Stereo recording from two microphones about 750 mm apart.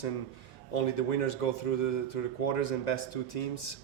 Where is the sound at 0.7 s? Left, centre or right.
Left.